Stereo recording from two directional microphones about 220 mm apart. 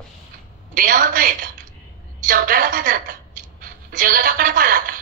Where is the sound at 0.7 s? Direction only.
40° right (ahead or behind).